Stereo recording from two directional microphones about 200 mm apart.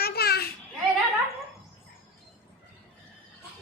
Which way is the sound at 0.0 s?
50° left (ahead or behind).